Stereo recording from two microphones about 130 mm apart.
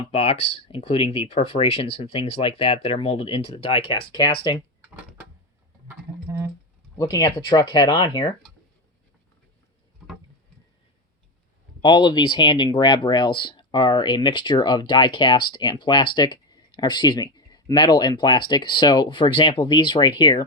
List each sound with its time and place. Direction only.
0.1 s speech: 50° left (ahead or behind)
7.0 s speech: 25° left (ahead or behind)
7.7 s speech: 40° left (ahead or behind)
11.8 s speech: 35° left (ahead or behind)